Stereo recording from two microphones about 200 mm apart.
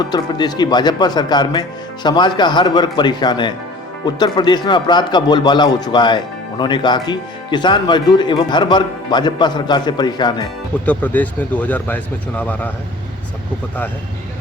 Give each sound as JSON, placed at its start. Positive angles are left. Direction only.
{"t": 0.0, "sound": "speech", "side_deg": 20}
{"t": 10.8, "sound": "speech", "side_deg": 10}